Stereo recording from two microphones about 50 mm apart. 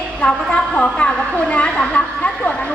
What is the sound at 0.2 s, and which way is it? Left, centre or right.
A woman's voice, left.